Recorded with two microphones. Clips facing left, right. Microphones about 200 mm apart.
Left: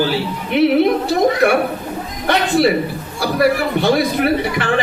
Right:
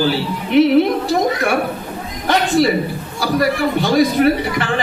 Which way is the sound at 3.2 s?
60° left (ahead or behind).